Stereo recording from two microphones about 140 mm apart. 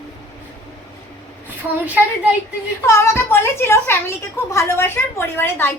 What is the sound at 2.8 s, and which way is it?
Speech, 20° left (ahead or behind).